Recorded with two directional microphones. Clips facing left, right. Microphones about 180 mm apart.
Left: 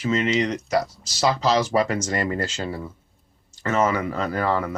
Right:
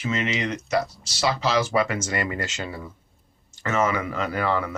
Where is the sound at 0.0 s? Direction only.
35° left (ahead or behind).